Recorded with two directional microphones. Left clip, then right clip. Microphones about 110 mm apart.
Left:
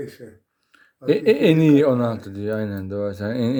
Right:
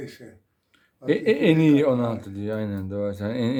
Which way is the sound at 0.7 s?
25° left (ahead or behind).